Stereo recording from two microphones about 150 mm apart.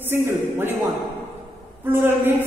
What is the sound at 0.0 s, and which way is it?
Speech, 15° right (ahead or behind).